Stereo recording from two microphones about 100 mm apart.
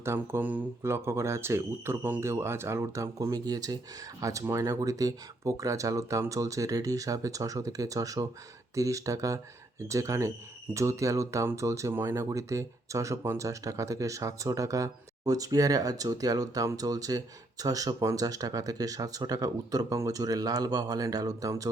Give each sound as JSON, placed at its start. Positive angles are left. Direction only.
{"t": 0.0, "sound": "speech", "side_deg": -25}